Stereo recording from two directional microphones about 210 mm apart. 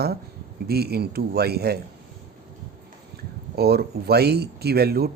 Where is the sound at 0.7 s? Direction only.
50° right (ahead or behind).